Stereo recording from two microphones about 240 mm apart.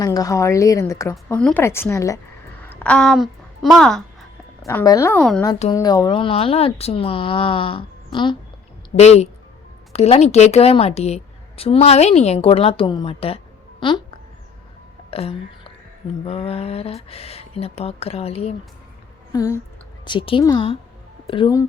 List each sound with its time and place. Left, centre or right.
0.0 s speech: centre
2.6 s a sound: centre
4.6 s speech: centre
5.7 s a woman's voice: centre
19.3 s a sound: centre
20.1 s speech: centre